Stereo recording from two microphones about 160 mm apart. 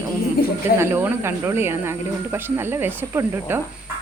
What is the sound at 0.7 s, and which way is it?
Speech, 15° right (ahead or behind).